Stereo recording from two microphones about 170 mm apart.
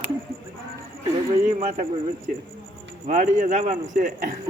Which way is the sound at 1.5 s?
45° right (ahead or behind).